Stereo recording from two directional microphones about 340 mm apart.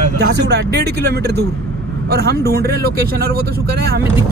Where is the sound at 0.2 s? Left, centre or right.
Right.